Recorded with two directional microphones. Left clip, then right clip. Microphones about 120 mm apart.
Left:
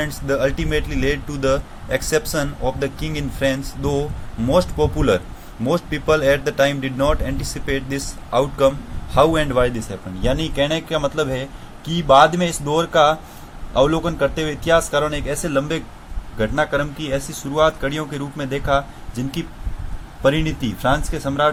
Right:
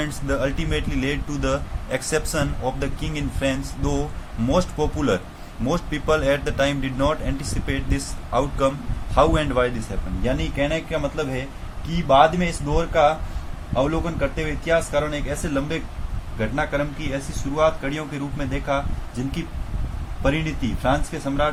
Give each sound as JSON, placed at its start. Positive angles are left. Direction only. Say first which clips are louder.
{"t": 0.0, "sound": "speech", "louder": "left 5 dB", "side_deg": 30}
{"t": 10.2, "sound": "speech", "louder": "left 4 dB", "side_deg": 55}
{"t": 12.0, "sound": "speech", "louder": "left 4 dB", "side_deg": 60}